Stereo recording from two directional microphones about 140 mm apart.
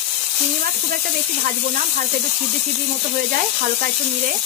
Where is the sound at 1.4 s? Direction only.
60° right (ahead or behind).